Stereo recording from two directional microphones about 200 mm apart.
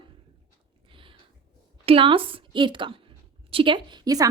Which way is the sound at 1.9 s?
25° right (ahead or behind).